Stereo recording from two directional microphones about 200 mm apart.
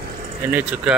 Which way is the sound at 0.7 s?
5° right (ahead or behind).